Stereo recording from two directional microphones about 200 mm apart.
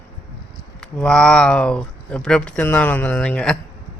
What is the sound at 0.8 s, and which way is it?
Speech, 5° left (ahead or behind).